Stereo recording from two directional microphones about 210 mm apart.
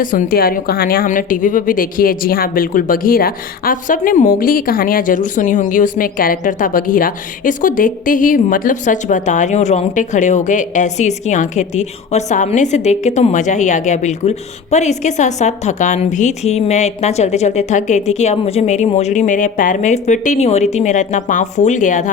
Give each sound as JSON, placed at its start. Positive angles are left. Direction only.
{"t": 0.0, "sound": "a woman's voice", "side_deg": 40}